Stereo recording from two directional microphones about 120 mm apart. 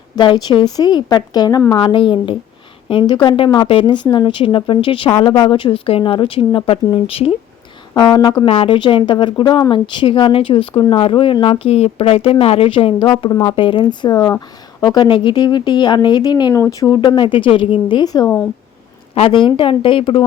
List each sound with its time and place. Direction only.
0.2 s a woman's voice: 40° left (ahead or behind)
7.9 s a woman's voice: 35° left (ahead or behind)
8.4 s a woman's voice: 50° left (ahead or behind); by 16.6 s 35° left (ahead or behind)
16.6 s speech: 25° left (ahead or behind)
16.9 s a woman's voice: 40° left (ahead or behind)
19.1 s speech: 50° left (ahead or behind)